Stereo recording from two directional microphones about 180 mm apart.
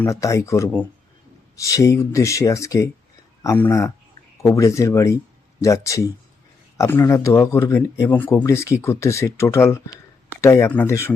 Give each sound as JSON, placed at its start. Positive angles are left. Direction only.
{"t": 0.0, "sound": "speech", "side_deg": 15}